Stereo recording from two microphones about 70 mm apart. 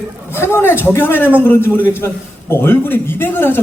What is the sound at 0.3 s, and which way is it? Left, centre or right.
Speech, left.